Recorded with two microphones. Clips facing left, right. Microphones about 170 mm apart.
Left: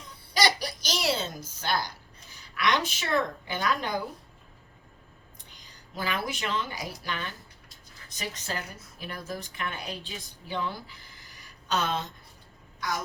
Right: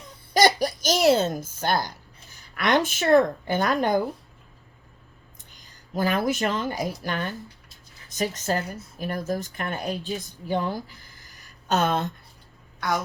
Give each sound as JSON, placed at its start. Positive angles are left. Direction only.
{"t": 0.3, "sound": "speech", "side_deg": -50}
{"t": 5.9, "sound": "a woman's voice", "side_deg": -45}